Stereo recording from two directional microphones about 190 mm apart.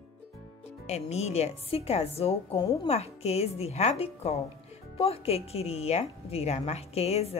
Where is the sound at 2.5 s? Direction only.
20° left (ahead or behind).